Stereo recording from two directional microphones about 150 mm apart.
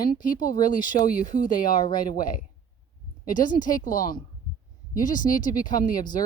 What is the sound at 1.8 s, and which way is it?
Speech, 30° left (ahead or behind).